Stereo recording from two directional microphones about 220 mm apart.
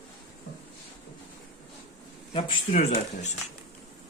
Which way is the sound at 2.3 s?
20° left (ahead or behind).